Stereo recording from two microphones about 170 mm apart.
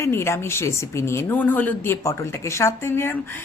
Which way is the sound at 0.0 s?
15° left (ahead or behind).